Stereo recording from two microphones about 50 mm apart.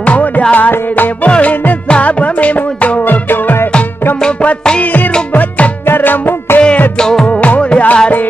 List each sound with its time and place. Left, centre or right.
0.0 s music: left
0.6 s music: left
3.0 s music: left
4.2 s music: left
4.8 s music: left
5.9 s music: left
7.0 s music: centre
7.2 s music: left